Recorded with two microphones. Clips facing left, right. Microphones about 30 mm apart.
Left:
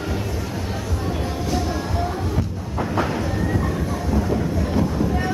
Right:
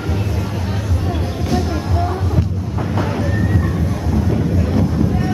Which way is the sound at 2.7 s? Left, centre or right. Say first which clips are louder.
Right 1 dB; centre.